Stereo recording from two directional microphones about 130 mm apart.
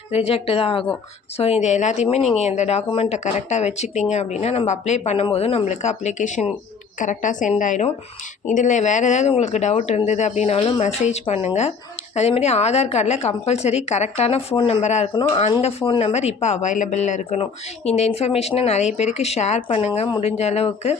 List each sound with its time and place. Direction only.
0.1 s a woman's voice: 50° left (ahead or behind)
19.6 s speech: 45° left (ahead or behind)